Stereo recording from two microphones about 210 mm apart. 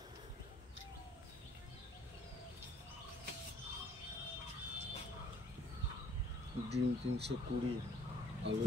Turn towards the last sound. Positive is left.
turn(degrees=-55)  # may be behind; listen again after turning